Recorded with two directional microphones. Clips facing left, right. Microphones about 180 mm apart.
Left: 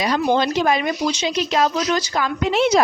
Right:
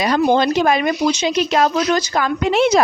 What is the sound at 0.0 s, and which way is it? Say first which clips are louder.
A woman's voice: right 3 dB; 55° right (ahead or behind).